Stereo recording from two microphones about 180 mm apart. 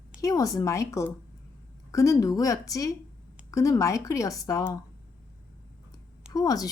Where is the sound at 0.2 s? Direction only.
20° left (ahead or behind).